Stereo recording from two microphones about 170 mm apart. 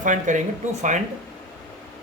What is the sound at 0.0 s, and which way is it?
Speech, 50° right (ahead or behind).